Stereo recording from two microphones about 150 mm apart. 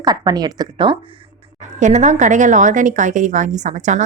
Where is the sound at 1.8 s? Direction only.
50° right (ahead or behind).